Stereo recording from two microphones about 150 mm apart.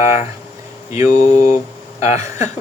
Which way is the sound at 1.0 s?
55° left (ahead or behind).